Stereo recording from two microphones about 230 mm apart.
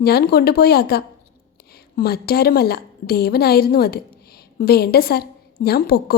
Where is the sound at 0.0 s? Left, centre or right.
Left.